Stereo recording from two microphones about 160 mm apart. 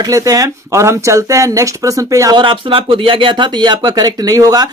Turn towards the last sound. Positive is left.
turn(degrees=-25)  # may be behind; listen again after turning